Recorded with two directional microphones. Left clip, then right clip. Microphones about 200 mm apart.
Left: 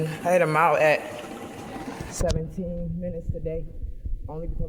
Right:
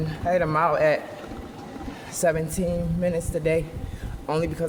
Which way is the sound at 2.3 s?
10° right (ahead or behind).